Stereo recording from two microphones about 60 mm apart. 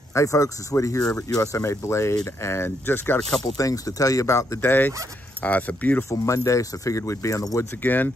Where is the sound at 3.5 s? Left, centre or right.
Left.